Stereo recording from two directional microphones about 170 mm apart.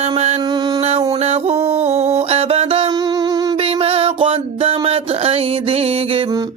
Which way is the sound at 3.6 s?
35° right (ahead or behind).